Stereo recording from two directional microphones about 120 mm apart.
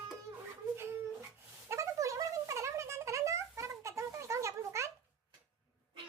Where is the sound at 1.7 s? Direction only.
25° right (ahead or behind).